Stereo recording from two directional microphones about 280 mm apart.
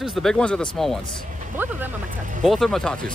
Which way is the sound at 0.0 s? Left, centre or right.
Centre.